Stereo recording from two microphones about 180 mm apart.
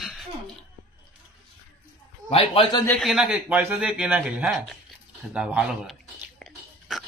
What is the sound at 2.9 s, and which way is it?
A man's voice, centre (ahead or behind).